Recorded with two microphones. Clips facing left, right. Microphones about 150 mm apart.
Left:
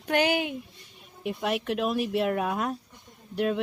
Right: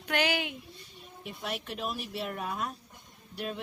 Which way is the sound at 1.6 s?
65° left (ahead or behind).